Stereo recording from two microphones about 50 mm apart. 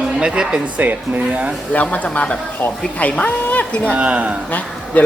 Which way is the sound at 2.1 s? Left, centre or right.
Centre.